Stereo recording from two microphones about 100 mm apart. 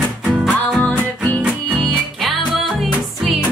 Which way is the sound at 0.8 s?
15° left (ahead or behind).